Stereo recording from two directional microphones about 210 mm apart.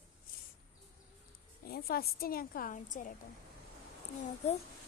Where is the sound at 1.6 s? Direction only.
45° left (ahead or behind).